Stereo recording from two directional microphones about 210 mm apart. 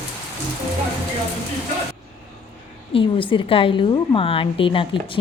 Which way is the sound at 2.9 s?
25° left (ahead or behind).